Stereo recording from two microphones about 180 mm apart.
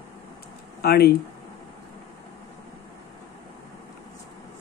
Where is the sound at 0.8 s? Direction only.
60° left (ahead or behind).